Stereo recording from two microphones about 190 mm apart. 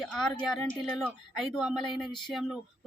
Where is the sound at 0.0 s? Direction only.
Centre (ahead or behind).